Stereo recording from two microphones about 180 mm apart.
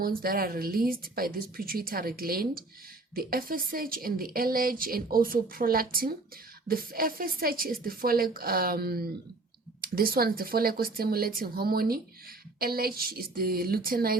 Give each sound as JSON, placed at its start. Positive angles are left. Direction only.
{"t": 0.0, "sound": "a woman's voice", "side_deg": -55}